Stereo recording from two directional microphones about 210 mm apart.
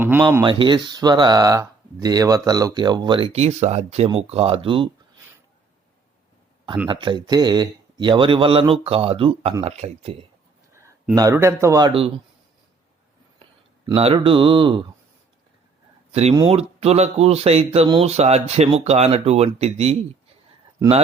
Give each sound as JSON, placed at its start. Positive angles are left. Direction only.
{"t": 0.0, "sound": "speech", "side_deg": -10}
{"t": 0.4, "sound": "speech", "side_deg": -25}
{"t": 6.8, "sound": "speech", "side_deg": -25}
{"t": 10.8, "sound": "speech", "side_deg": -15}
{"t": 13.4, "sound": "speech", "side_deg": -25}
{"t": 16.3, "sound": "speech", "side_deg": -25}